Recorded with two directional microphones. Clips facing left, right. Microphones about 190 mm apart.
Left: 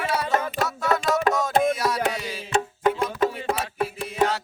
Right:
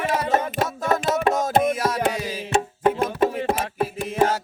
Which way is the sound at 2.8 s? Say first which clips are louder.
Right 3 dB; 25° right (ahead or behind).